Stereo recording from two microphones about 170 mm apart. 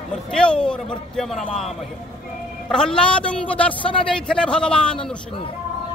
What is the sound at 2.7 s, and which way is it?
A man's voice, 5° left (ahead or behind).